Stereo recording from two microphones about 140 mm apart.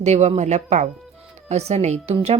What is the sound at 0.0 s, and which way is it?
Speech, 55° right (ahead or behind).